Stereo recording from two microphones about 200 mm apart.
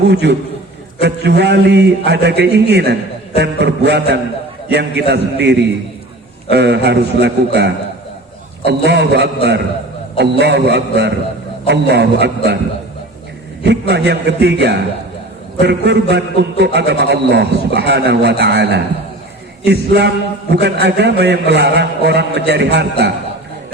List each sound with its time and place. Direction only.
0.1 s a man's voice: 60° right (ahead or behind)
13.6 s a man's voice: 55° right (ahead or behind)